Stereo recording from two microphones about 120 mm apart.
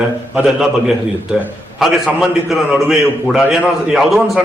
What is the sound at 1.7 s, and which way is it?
A man's voice, centre (ahead or behind).